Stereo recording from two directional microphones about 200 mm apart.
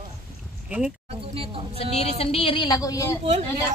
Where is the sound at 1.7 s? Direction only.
30° left (ahead or behind).